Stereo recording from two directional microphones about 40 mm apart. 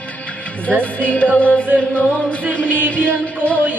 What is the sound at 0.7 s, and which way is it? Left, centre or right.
Music, left.